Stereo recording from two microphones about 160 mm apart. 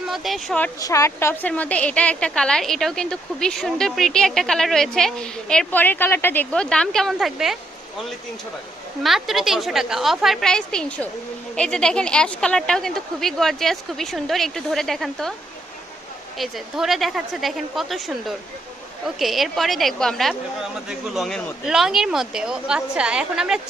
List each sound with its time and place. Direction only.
0.1 s a woman's voice: centre (ahead or behind)
0.8 s a woman's voice: 20° left (ahead or behind); by 7.6 s centre (ahead or behind)
9.0 s a woman's voice: centre (ahead or behind)
16.4 s a woman's voice: centre (ahead or behind)